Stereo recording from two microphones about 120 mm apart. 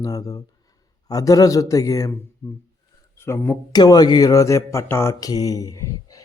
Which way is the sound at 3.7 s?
35° left (ahead or behind).